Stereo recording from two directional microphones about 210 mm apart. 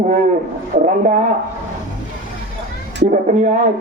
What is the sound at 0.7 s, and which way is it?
Speech, 35° right (ahead or behind).